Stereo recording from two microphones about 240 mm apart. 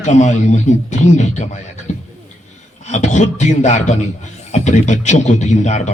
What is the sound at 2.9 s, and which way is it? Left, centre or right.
A man's voice, left.